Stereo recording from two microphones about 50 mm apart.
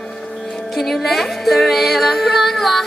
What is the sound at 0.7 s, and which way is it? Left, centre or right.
Music, centre.